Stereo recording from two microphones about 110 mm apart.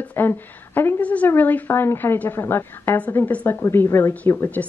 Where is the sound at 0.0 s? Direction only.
15° left (ahead or behind).